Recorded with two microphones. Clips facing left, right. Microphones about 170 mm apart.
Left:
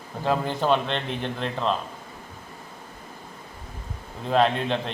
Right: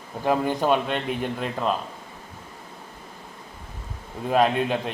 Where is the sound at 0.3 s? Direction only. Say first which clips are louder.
Right 1 dB; 15° right (ahead or behind).